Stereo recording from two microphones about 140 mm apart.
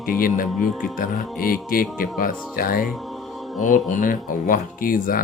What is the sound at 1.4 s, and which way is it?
Speech, 90° left.